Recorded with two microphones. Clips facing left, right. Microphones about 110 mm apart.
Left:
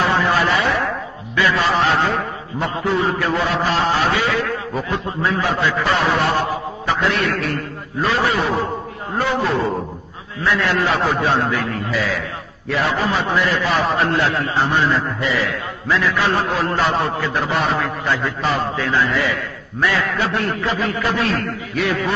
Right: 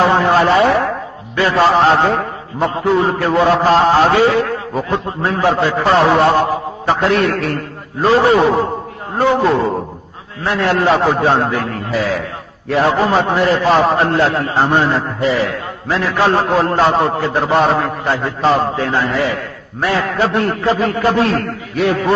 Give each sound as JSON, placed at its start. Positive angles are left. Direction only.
{"t": 0.0, "sound": "a sound", "side_deg": -35}
{"t": 1.5, "sound": "a man's voice", "side_deg": -40}
{"t": 6.4, "sound": "a man's voice", "side_deg": -40}
{"t": 8.0, "sound": "a man's voice", "side_deg": -30}
{"t": 10.4, "sound": "a man's voice", "side_deg": -40}
{"t": 13.1, "sound": "a man's voice", "side_deg": -40}